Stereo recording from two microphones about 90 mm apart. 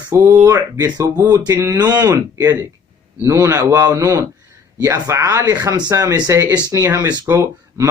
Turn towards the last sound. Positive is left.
turn(degrees=-35)  # may be behind; listen again after turning